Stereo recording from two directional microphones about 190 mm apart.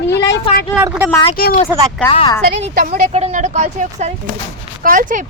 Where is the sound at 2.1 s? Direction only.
30° left (ahead or behind).